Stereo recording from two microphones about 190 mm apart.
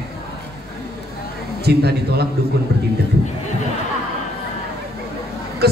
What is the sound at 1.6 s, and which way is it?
A man's voice, 60° right (ahead or behind).